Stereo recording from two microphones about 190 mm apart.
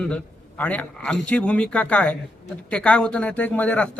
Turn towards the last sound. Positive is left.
turn(degrees=5)  # may be behind; listen again after turning